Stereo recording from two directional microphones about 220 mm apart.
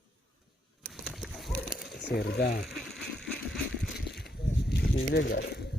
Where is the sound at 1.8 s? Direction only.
50° left (ahead or behind).